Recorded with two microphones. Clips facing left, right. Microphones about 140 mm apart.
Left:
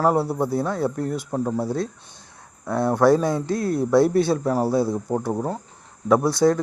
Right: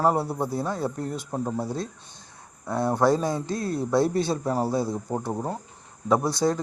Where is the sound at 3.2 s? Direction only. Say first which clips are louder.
Left 4 dB; 65° left (ahead or behind).